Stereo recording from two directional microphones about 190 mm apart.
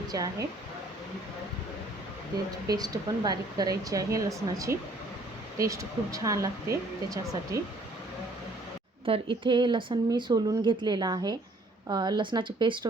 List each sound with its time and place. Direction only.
0.1 s speech: 20° right (ahead or behind)
2.6 s speech: 20° right (ahead or behind)
9.0 s speech: 30° right (ahead or behind)